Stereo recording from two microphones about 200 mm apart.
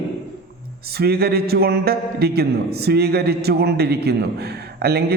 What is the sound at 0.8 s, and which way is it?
A man's voice, 50° right (ahead or behind).